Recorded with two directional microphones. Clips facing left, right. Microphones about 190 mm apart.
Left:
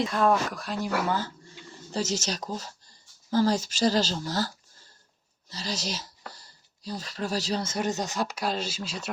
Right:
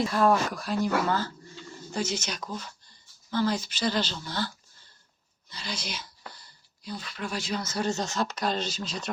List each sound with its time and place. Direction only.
0.0 s speech: centre (ahead or behind)
1.0 s a sound: 15° left (ahead or behind)
1.9 s speech: 40° left (ahead or behind); by 9.0 s 10° left (ahead or behind)